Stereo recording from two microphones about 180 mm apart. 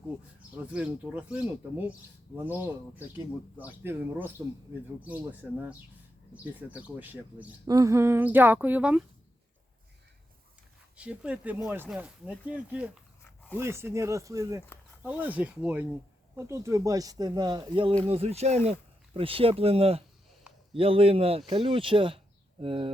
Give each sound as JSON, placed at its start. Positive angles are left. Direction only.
{"t": 0.5, "sound": "speech", "side_deg": -5}
{"t": 3.8, "sound": "speech", "side_deg": -10}
{"t": 10.9, "sound": "speech", "side_deg": -5}